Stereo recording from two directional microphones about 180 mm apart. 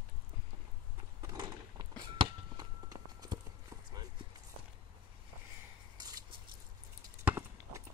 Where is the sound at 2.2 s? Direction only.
25° right (ahead or behind).